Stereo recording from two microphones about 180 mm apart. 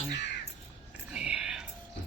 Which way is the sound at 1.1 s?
5° right (ahead or behind).